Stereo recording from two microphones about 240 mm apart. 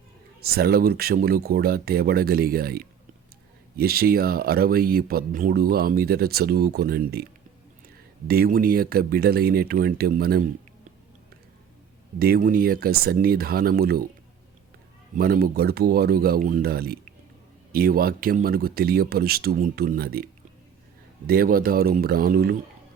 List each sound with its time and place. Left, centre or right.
0.4 s speech: right
8.3 s speech: right
12.2 s speech: right
15.1 s speech: right